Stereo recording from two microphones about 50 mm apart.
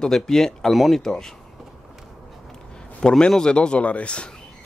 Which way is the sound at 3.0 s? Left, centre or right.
Centre.